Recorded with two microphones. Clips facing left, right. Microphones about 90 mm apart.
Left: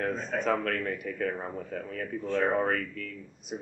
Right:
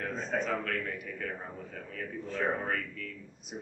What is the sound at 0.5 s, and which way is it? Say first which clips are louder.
A man's voice: left 5 dB; 50° left (ahead or behind).